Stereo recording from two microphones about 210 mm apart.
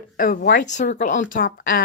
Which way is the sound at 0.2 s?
45° left (ahead or behind).